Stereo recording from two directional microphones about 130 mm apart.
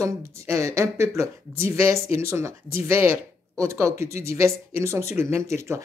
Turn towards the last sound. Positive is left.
turn(degrees=-20)  # may be behind; listen again after turning